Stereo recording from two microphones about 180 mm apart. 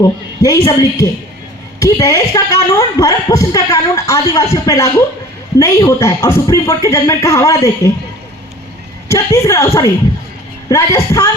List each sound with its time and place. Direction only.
0.0 s a woman's voice: 20° left (ahead or behind)
9.0 s speech: 15° left (ahead or behind)